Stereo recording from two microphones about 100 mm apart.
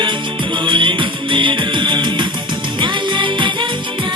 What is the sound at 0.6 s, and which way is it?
Music, 55° right (ahead or behind).